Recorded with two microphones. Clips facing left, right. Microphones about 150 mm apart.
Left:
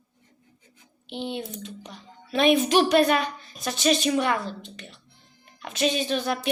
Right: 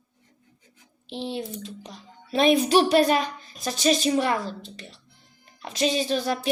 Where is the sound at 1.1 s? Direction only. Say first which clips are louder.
Right 1 dB; 35° right (ahead or behind).